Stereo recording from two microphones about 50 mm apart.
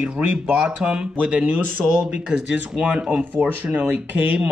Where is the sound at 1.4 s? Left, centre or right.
Right.